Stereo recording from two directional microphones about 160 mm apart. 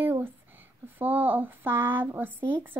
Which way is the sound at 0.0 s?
15° right (ahead or behind).